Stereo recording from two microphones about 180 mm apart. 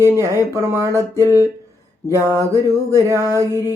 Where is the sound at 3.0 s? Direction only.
15° right (ahead or behind).